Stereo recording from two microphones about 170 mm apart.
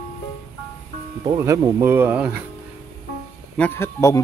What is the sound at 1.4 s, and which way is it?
Speech, 15° right (ahead or behind).